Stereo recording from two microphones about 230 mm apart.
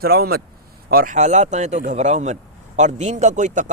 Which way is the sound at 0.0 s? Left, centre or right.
Right.